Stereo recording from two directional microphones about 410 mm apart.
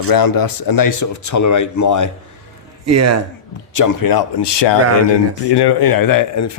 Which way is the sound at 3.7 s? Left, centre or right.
Left.